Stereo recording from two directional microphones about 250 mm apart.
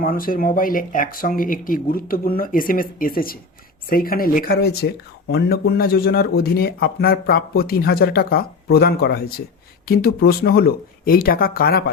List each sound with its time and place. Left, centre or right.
0.0 s a man's voice: left